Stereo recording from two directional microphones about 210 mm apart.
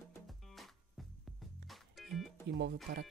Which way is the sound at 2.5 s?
55° right (ahead or behind).